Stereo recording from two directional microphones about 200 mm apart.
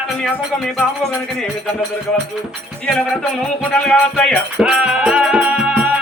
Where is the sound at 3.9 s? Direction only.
5° left (ahead or behind).